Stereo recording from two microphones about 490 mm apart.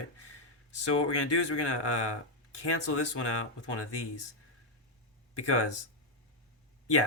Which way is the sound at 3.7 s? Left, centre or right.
Left.